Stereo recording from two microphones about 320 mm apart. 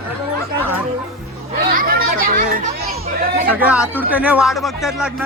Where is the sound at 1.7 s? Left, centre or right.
Right.